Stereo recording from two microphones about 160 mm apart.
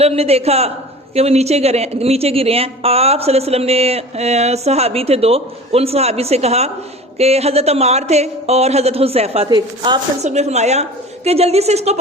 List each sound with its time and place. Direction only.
0.0 s a woman's voice: 40° right (ahead or behind)
9.5 s a woman's voice: 25° right (ahead or behind)
10.2 s a woman's voice: 45° right (ahead or behind)